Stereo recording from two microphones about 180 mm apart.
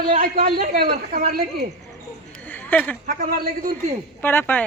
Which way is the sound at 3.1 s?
50° right (ahead or behind).